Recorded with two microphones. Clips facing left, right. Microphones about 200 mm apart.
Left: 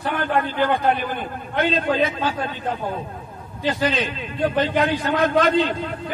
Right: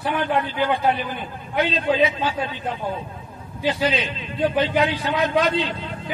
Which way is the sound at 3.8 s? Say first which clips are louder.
Left 1 dB; 50° left (ahead or behind).